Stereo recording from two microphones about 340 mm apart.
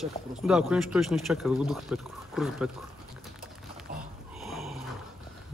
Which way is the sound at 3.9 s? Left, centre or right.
Right.